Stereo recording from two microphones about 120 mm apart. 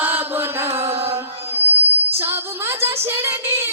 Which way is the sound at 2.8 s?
20° right (ahead or behind).